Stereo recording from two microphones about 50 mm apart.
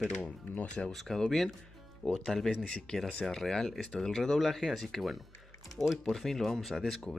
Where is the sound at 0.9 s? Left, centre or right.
Centre.